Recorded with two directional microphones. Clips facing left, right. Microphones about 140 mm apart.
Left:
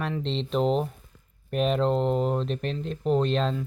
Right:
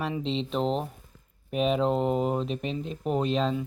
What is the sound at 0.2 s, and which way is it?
Speech, centre (ahead or behind).